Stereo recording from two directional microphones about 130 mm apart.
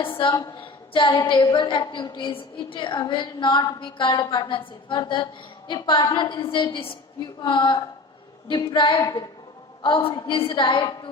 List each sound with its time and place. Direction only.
0.0 s a woman's voice: 40° left (ahead or behind)
9.8 s a woman's voice: 40° left (ahead or behind)